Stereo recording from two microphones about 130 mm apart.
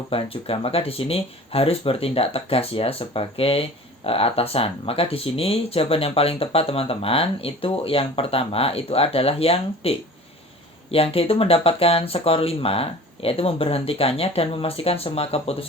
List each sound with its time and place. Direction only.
0.1 s speech: 45° left (ahead or behind)